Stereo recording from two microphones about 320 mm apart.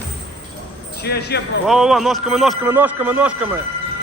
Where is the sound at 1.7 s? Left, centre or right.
Centre.